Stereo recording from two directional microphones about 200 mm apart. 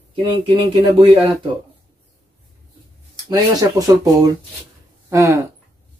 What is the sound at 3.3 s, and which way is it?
Speech, 15° right (ahead or behind).